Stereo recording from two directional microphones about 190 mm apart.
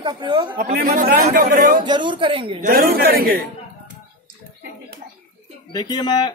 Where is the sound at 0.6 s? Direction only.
50° right (ahead or behind).